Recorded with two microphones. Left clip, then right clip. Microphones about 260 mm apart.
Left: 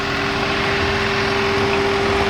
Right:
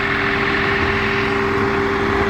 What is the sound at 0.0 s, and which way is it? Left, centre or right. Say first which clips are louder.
Vehicle: right 2 dB; left.